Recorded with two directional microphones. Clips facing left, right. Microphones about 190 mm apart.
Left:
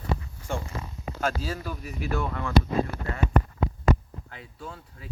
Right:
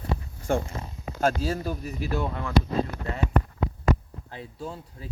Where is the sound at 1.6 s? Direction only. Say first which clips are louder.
Right 4 dB; 40° right (ahead or behind).